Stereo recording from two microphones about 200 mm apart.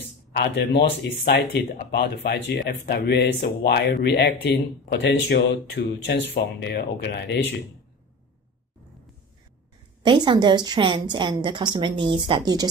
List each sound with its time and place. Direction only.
0.3 s speech: 60° left (ahead or behind)
10.0 s a woman's voice: 25° right (ahead or behind)